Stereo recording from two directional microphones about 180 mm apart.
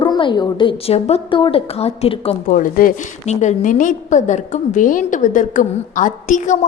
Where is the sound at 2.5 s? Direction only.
50° left (ahead or behind).